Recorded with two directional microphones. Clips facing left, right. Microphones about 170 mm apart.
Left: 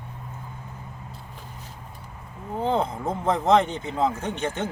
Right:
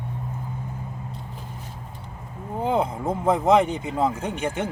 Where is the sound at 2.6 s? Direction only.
10° right (ahead or behind).